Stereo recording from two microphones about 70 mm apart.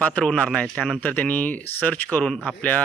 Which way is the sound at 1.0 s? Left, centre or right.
Left.